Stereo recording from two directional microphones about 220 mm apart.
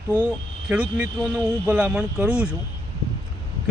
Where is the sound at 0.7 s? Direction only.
5° right (ahead or behind).